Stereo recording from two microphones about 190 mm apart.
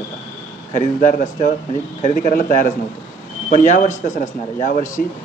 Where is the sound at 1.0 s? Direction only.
45° left (ahead or behind).